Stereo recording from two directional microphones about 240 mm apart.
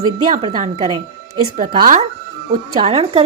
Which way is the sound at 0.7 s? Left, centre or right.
Right.